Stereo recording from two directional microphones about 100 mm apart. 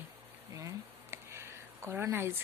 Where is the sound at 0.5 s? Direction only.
30° right (ahead or behind).